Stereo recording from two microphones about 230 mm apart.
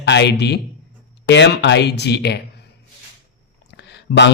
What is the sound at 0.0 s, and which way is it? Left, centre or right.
Speech, left.